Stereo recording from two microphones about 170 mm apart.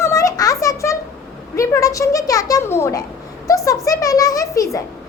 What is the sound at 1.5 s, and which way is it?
A child's voice, 20° left (ahead or behind).